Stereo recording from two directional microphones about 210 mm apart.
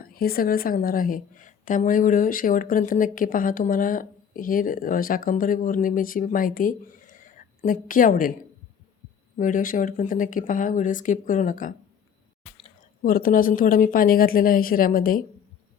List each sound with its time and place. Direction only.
0.0 s a woman's voice: 45° left (ahead or behind)
9.4 s a woman's voice: 40° left (ahead or behind)
13.0 s a woman's voice: 45° left (ahead or behind)